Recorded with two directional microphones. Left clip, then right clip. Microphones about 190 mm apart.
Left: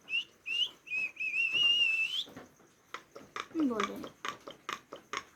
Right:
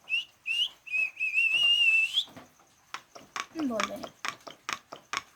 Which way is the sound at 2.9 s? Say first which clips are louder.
Right 4 dB; 30° right (ahead or behind).